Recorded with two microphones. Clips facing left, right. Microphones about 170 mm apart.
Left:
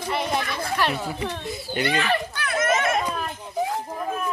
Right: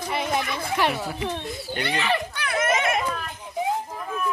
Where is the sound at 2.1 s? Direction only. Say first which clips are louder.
Left 1 dB; 15° right (ahead or behind).